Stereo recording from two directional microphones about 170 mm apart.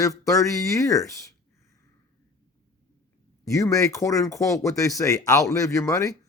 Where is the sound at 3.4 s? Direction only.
20° left (ahead or behind).